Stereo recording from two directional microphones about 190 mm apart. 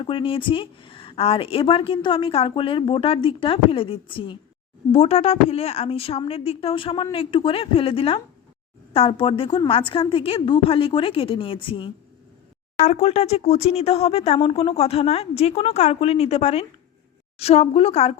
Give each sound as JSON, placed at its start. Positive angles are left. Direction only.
{"t": 0.0, "sound": "a woman's voice", "side_deg": 25}